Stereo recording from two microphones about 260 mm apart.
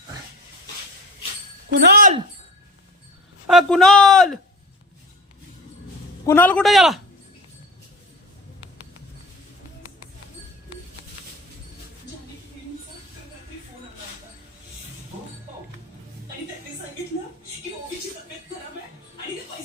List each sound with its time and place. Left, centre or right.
1.9 s speech: right
3.4 s speech: centre
6.2 s speech: centre